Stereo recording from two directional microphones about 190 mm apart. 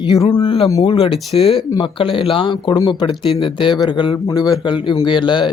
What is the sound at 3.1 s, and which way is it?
Speech, centre (ahead or behind).